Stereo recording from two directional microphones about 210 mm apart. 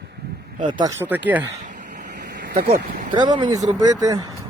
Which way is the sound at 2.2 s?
45° right (ahead or behind).